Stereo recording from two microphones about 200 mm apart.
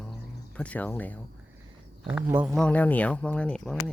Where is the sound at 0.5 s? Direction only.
5° left (ahead or behind).